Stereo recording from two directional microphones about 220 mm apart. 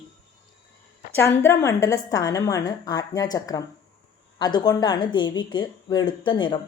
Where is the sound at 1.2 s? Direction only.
10° left (ahead or behind).